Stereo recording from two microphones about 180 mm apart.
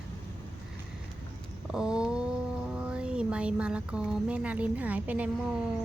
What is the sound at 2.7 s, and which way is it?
Speech, 5° right (ahead or behind).